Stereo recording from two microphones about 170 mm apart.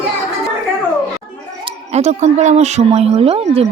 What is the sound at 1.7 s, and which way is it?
Speech, 40° right (ahead or behind).